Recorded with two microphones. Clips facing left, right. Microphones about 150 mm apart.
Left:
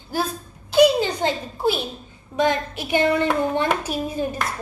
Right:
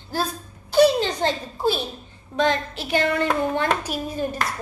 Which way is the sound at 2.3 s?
15° left (ahead or behind).